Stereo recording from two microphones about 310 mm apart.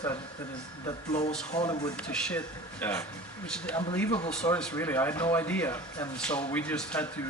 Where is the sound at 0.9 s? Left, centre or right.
Left.